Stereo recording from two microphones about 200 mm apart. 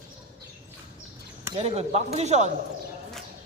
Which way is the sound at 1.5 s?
30° right (ahead or behind).